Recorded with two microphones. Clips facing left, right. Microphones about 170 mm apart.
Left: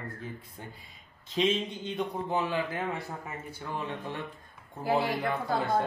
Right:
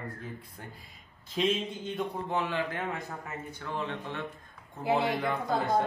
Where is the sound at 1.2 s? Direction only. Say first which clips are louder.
Left 1 dB; centre (ahead or behind).